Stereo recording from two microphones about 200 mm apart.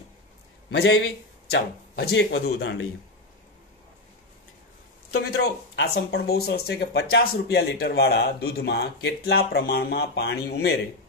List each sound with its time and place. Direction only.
0.7 s speech: 60° left (ahead or behind)
5.1 s speech: 55° left (ahead or behind)